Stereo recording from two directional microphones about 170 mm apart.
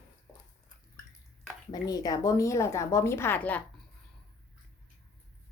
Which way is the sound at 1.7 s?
20° left (ahead or behind).